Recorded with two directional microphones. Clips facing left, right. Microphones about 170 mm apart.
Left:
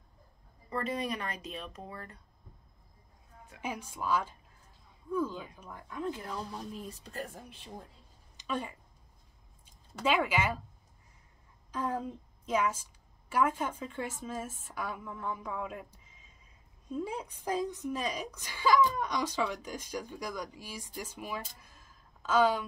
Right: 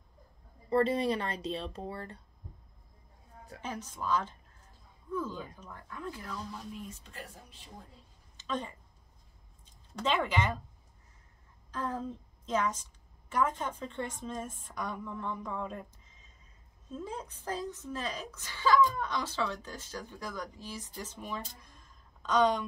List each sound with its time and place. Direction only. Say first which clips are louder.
0.7 s speech: right 7 dB; 30° right (ahead or behind)
3.6 s speech: left 1 dB; 10° left (ahead or behind); by 7.2 s 40° left (ahead or behind)
8.4 s speech: even; 10° left (ahead or behind)
9.9 s speech: left 1 dB; 10° left (ahead or behind)
11.7 s a woman's voice: left 2 dB; 10° left (ahead or behind)